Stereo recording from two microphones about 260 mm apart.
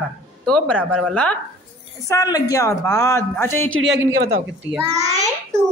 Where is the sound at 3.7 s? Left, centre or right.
Right.